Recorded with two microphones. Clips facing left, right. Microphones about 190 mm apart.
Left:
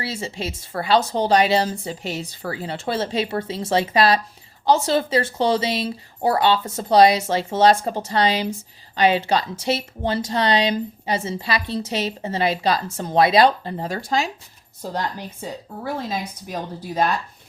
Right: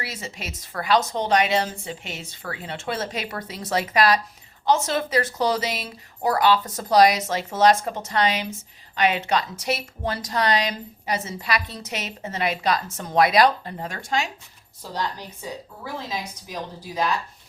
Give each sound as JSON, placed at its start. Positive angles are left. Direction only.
{"t": 0.0, "sound": "a woman's voice", "side_deg": 30}
{"t": 15.8, "sound": "a woman's voice", "side_deg": 50}